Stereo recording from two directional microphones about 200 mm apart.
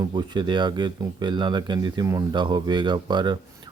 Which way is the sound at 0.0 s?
20° right (ahead or behind).